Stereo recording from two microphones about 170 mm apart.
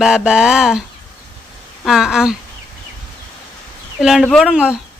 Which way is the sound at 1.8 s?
Centre (ahead or behind).